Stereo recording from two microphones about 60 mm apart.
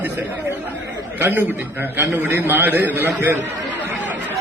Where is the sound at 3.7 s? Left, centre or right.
Right.